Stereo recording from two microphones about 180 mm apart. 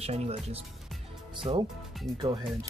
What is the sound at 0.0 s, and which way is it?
Speech, 35° right (ahead or behind).